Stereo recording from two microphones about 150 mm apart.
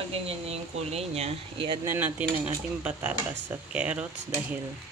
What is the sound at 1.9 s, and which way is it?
Speech, 15° right (ahead or behind).